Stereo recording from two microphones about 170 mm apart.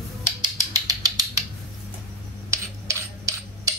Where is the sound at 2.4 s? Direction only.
15° right (ahead or behind).